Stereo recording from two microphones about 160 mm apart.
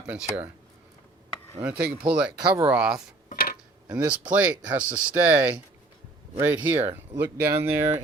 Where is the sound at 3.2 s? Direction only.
60° left (ahead or behind).